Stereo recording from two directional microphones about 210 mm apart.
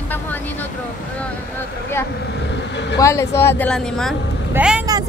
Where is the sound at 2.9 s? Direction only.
15° left (ahead or behind).